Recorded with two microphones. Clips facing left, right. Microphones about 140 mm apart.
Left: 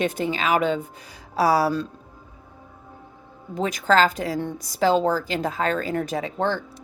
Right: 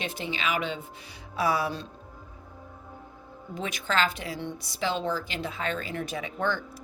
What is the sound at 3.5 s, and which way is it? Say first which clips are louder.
A woman's voice: left 9 dB; 40° left (ahead or behind).